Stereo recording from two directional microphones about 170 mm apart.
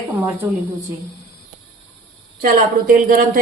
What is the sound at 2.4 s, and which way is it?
A woman's voice, 60° right (ahead or behind).